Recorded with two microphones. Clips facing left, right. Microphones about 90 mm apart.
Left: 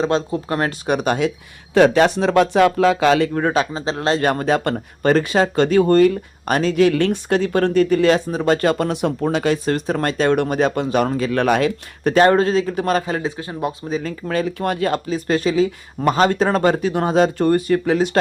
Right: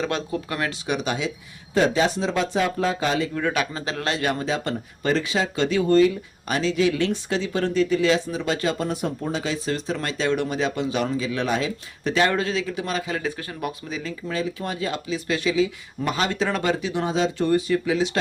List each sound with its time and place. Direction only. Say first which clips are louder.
0.0 s speech: left 7 dB; 30° left (ahead or behind); by 1.3 s 50° left (ahead or behind)
1.7 s speech: left 7 dB; 70° left (ahead or behind); by 3.2 s 85° left
3.3 s speech: left 6 dB; 35° left (ahead or behind); by 12.1 s 60° left (ahead or behind)
12.1 s speech: left 8 dB; 40° left (ahead or behind)
13.2 s speech: left 5 dB; 25° left (ahead or behind)
14.3 s speech: left 7 dB; 60° left (ahead or behind)